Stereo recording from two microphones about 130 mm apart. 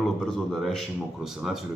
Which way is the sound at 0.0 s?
Centre (ahead or behind).